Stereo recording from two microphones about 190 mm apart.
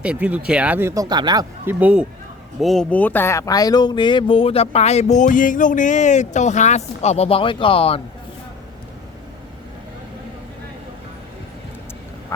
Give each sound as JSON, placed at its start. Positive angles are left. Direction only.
{"t": 0.0, "sound": "speech", "side_deg": -5}
{"t": 1.8, "sound": "speech", "side_deg": -5}